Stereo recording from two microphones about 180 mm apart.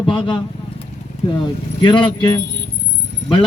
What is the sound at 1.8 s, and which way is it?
Speech, 25° left (ahead or behind).